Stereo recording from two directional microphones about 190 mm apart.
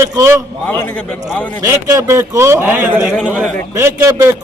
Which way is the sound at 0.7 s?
10° left (ahead or behind).